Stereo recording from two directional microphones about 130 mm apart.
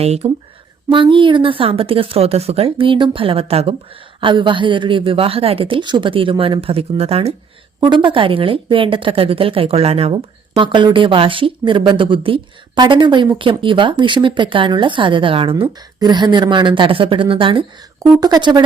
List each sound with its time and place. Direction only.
0.0 s speech: 55° right (ahead or behind)
0.9 s speech: 40° right (ahead or behind)
4.2 s a woman's voice: 40° right (ahead or behind)
7.8 s a woman's voice: 35° right (ahead or behind)